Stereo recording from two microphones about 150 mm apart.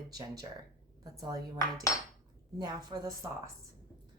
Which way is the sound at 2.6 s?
25° right (ahead or behind).